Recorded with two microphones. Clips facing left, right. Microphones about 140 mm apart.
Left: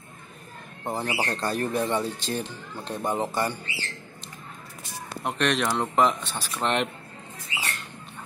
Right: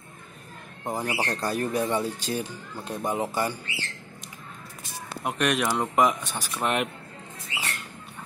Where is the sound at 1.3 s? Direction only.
10° right (ahead or behind).